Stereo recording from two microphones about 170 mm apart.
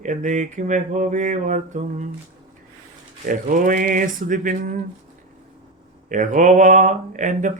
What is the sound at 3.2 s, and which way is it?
Speech, 50° right (ahead or behind).